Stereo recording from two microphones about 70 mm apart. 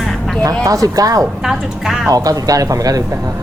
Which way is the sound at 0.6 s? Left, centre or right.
Right.